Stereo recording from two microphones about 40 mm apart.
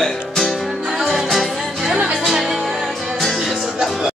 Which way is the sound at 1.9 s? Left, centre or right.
Centre.